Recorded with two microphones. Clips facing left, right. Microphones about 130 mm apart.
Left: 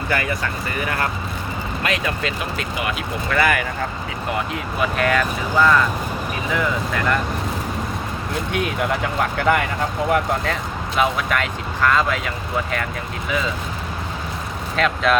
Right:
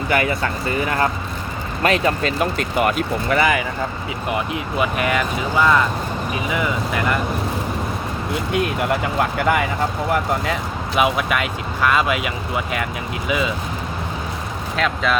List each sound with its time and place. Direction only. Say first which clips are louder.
0.1 s speech: right 4 dB; 20° right (ahead or behind)
1.8 s speech: right 6 dB; 40° right (ahead or behind)
3.2 s speech: right 1 dB; 20° right (ahead or behind)
4.8 s speech: left 1 dB; 10° right (ahead or behind)
8.5 s speech: right 2 dB; 5° right (ahead or behind)
14.8 s speech: left 2 dB; centre (ahead or behind)